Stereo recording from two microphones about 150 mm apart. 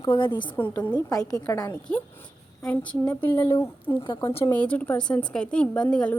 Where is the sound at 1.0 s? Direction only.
25° left (ahead or behind).